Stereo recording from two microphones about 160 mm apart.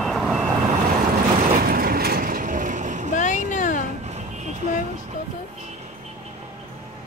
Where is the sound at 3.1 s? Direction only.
50° left (ahead or behind).